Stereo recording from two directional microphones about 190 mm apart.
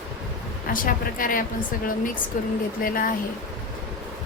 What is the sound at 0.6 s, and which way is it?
A woman's voice, 45° left (ahead or behind).